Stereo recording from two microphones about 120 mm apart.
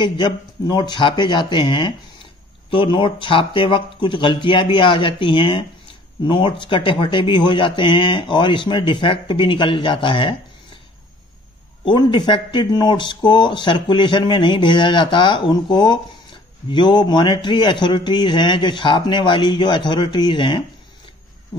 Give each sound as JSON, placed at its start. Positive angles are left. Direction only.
{"t": 0.0, "sound": "speech", "side_deg": 40}
{"t": 11.8, "sound": "speech", "side_deg": 40}